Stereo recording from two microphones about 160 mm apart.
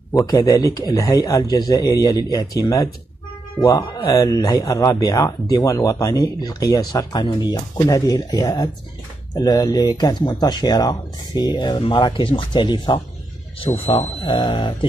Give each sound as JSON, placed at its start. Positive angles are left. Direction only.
{"t": 0.1, "sound": "speech", "side_deg": 25}